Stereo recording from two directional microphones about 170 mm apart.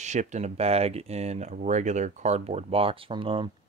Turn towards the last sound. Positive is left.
turn(degrees=-30)  # may be behind; listen again after turning